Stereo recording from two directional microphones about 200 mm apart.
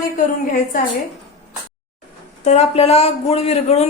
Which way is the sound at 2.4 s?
35° left (ahead or behind).